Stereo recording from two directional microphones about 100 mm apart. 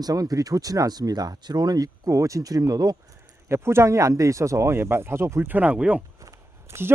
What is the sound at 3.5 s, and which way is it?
Speech, 25° right (ahead or behind).